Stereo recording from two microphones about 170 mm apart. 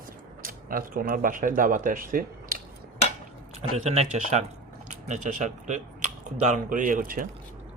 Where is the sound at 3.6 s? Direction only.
40° right (ahead or behind); by 7.3 s 55° right (ahead or behind).